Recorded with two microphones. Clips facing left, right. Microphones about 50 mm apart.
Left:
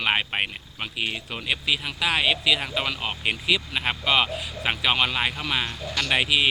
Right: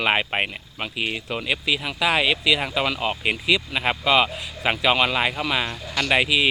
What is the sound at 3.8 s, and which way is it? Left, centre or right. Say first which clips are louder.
Speech: right 4 dB; right.